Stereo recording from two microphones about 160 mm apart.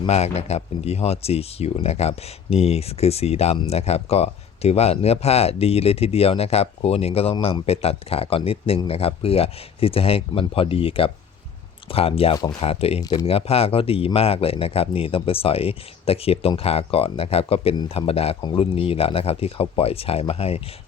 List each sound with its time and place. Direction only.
0.1 s speech: 40° left (ahead or behind)